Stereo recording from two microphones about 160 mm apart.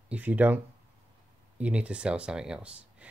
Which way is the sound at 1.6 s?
5° right (ahead or behind).